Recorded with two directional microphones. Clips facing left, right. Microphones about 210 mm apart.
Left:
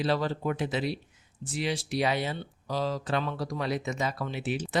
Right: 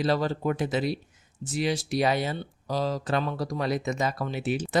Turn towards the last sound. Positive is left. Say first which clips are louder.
# right 3 dB
turn(degrees=-40)  # may be behind; listen again after turning